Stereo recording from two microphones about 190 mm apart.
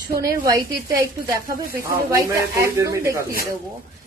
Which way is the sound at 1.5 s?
50° right (ahead or behind).